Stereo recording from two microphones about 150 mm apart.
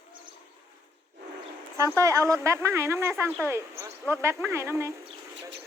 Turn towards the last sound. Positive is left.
turn(degrees=-20)  # may be behind; listen again after turning